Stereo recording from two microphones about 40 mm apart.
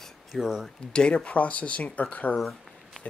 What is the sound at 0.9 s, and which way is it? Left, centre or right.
Speech, left.